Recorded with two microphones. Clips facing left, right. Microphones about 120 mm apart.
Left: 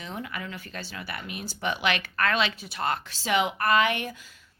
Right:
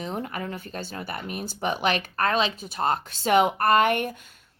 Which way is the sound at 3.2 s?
50° right (ahead or behind).